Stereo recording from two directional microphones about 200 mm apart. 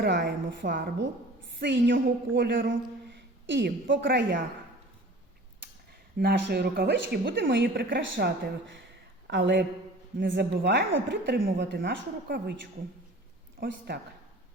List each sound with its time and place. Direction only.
0.0 s speech: 50° right (ahead or behind)
1.5 s a woman's voice: 60° right (ahead or behind)
6.1 s speech: 50° right (ahead or behind)
7.5 s speech: 50° right (ahead or behind)
9.2 s a woman's voice: 65° right (ahead or behind)
13.6 s a woman's voice: 55° right (ahead or behind)